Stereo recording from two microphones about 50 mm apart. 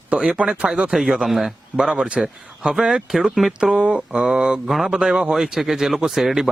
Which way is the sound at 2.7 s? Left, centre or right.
Centre.